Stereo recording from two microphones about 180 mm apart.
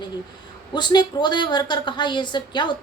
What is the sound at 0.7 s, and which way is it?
A woman's voice, 25° left (ahead or behind).